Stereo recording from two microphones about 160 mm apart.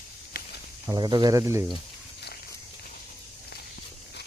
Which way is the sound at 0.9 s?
25° right (ahead or behind).